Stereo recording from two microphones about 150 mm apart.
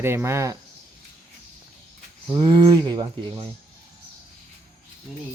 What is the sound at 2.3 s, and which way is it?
Speech, 30° right (ahead or behind).